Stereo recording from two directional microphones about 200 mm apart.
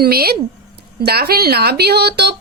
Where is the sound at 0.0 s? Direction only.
50° right (ahead or behind).